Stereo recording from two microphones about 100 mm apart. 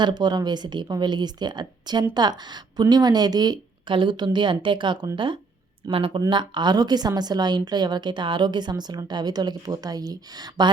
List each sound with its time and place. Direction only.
0.0 s a woman's voice: 45° right (ahead or behind); by 6.2 s 60° right (ahead or behind)
6.3 s a woman's voice: 50° right (ahead or behind)